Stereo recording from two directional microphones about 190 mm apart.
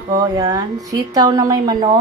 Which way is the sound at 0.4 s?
20° right (ahead or behind).